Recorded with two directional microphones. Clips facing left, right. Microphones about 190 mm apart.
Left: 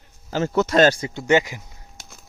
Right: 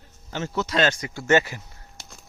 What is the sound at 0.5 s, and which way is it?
Speech, 50° left (ahead or behind).